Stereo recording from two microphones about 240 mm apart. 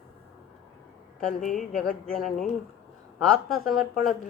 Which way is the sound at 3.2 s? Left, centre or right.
Centre.